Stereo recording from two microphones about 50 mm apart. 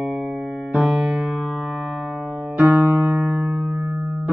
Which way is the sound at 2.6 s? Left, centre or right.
Right.